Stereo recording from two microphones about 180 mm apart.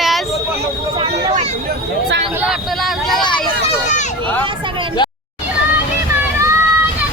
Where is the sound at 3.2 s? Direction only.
25° left (ahead or behind).